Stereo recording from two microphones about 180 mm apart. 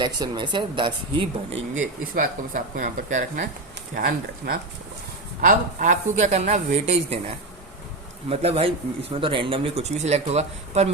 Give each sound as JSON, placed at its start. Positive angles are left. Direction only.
{"t": 0.0, "sound": "speech", "side_deg": -25}
{"t": 1.7, "sound": "speech", "side_deg": -45}